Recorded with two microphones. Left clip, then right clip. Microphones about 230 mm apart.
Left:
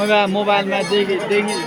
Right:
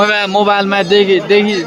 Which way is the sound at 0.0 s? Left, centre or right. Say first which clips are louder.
Right 5 dB; right.